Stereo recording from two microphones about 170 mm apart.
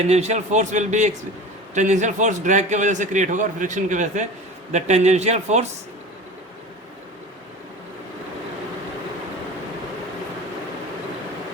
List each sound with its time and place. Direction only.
0.1 s a man's voice: 40° right (ahead or behind)